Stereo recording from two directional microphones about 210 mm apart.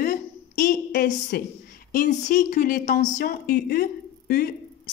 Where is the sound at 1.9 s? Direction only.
35° left (ahead or behind).